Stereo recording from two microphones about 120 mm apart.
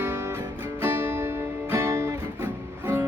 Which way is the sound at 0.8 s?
20° right (ahead or behind).